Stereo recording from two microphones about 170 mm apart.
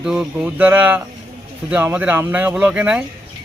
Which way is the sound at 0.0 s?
5° right (ahead or behind).